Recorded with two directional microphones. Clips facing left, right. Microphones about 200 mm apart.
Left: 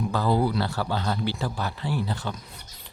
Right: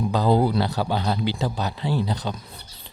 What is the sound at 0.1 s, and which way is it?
Speech, 20° right (ahead or behind).